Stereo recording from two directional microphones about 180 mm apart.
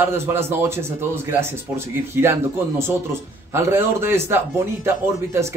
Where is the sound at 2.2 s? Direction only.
15° right (ahead or behind).